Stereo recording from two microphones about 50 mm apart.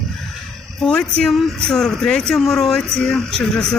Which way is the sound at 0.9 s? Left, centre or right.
Centre.